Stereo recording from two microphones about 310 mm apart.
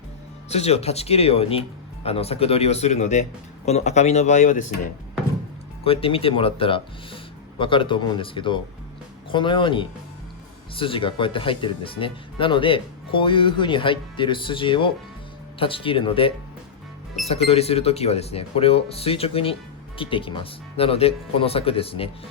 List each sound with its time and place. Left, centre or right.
0.5 s speech: centre
5.8 s speech: centre